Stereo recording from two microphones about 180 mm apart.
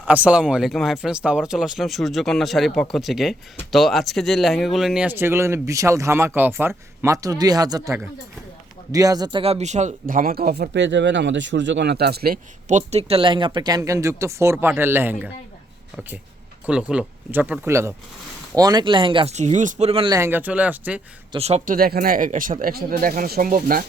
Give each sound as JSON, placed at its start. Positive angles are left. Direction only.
{"t": 0.1, "sound": "speech", "side_deg": -5}
{"t": 12.6, "sound": "speech", "side_deg": -40}
{"t": 16.6, "sound": "speech", "side_deg": -5}
{"t": 20.1, "sound": "speech", "side_deg": -15}
{"t": 21.3, "sound": "speech", "side_deg": -35}
{"t": 21.8, "sound": "speech", "side_deg": -55}